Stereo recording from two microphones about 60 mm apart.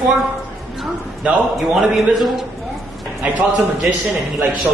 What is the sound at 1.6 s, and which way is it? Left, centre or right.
Speech, centre.